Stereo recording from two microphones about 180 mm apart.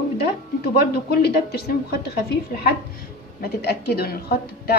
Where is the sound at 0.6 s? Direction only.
60° left (ahead or behind).